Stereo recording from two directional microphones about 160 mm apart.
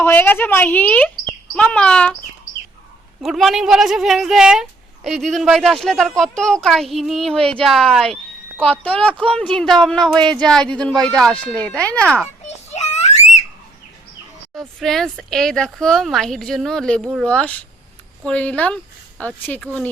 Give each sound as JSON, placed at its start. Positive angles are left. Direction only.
{"t": 0.0, "sound": "speech", "side_deg": 10}
{"t": 3.2, "sound": "a woman's voice", "side_deg": 0}
{"t": 7.3, "sound": "speech", "side_deg": -35}
{"t": 7.6, "sound": "a woman's voice", "side_deg": 0}
{"t": 12.7, "sound": "a sound", "side_deg": 45}
{"t": 14.8, "sound": "a woman's voice", "side_deg": 0}